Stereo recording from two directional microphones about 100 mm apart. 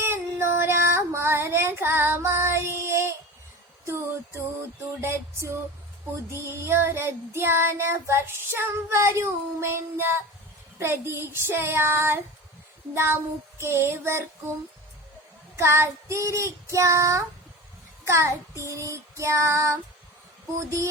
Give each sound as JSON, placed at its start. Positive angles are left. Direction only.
{"t": 0.0, "sound": "child singing", "side_deg": -25}
{"t": 15.5, "sound": "child singing", "side_deg": -30}
{"t": 20.6, "sound": "a sound", "side_deg": -30}